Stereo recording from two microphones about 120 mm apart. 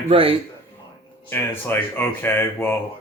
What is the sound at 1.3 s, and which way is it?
Speech, 20° left (ahead or behind).